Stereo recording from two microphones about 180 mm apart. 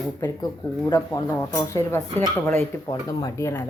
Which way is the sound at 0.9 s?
15° left (ahead or behind).